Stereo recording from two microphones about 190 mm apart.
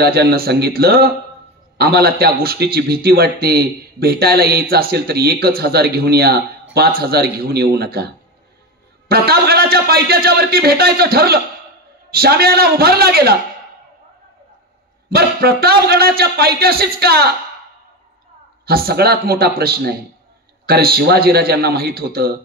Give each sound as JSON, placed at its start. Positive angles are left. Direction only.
{"t": 0.0, "sound": "speech", "side_deg": -55}
{"t": 9.1, "sound": "speech", "side_deg": -55}
{"t": 15.0, "sound": "speech", "side_deg": -55}
{"t": 18.7, "sound": "speech", "side_deg": -55}